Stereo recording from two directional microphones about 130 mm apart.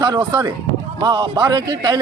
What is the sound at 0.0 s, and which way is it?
Speech, 35° right (ahead or behind).